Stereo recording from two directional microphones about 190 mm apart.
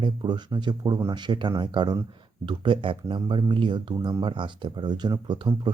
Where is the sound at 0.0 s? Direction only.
25° right (ahead or behind).